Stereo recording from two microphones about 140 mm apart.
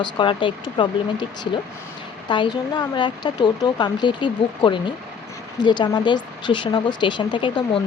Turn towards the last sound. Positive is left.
turn(degrees=35)  # may be behind; listen again after turning